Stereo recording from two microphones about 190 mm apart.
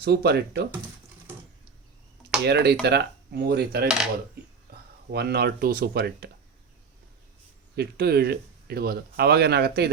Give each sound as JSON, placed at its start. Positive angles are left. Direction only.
{"t": 0.0, "sound": "speech", "side_deg": -60}
{"t": 2.4, "sound": "speech", "side_deg": -60}
{"t": 5.1, "sound": "speech", "side_deg": -60}
{"t": 7.8, "sound": "speech", "side_deg": -55}